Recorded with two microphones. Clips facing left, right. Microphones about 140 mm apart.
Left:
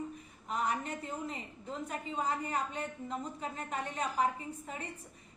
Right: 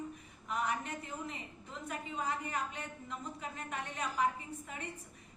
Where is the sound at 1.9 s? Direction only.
30° left (ahead or behind).